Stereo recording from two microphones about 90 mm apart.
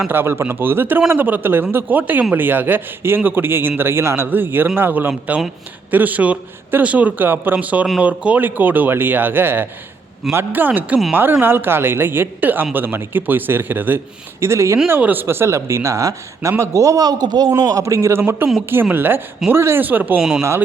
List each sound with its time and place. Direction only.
0.1 s a man's voice: 25° right (ahead or behind)
14.4 s speech: 30° right (ahead or behind)
18.2 s a man's voice: 25° right (ahead or behind)